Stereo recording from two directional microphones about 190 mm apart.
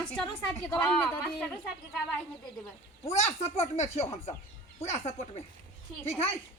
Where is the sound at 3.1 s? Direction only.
35° left (ahead or behind).